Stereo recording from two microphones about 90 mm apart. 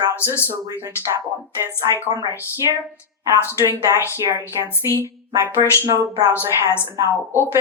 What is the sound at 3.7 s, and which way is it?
Speech, 35° right (ahead or behind).